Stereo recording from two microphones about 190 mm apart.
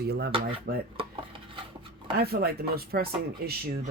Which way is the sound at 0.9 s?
30° right (ahead or behind).